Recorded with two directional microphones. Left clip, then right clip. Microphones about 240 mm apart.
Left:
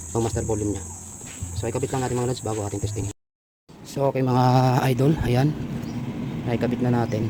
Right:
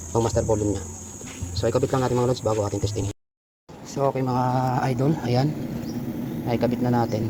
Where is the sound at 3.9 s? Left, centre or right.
Left.